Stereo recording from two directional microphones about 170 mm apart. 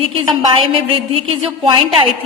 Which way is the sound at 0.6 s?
35° right (ahead or behind).